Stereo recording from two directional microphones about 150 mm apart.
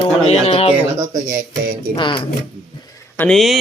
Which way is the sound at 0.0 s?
40° left (ahead or behind).